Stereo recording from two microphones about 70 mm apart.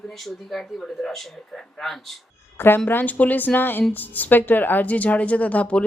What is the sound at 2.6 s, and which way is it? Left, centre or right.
A woman's voice, left.